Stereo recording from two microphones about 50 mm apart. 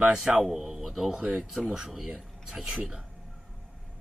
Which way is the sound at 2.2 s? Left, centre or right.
Centre.